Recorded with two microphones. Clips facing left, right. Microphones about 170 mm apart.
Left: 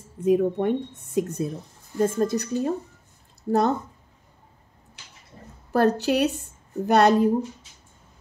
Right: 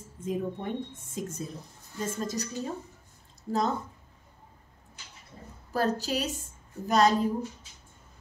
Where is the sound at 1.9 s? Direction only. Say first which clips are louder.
Left 10 dB; 55° left (ahead or behind).